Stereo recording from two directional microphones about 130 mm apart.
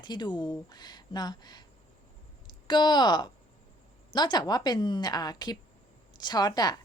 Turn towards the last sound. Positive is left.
turn(degrees=30)  # may be behind; listen again after turning